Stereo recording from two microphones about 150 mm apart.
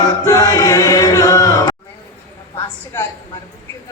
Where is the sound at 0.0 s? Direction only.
25° left (ahead or behind).